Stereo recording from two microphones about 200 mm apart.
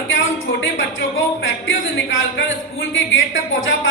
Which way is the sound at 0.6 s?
75° left (ahead or behind).